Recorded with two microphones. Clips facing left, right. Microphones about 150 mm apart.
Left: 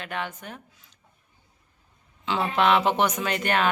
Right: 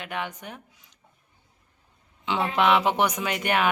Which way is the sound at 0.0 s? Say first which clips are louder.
Even; 15° right (ahead or behind).